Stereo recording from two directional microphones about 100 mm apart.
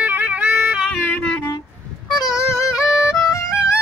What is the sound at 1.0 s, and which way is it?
Music, 20° left (ahead or behind).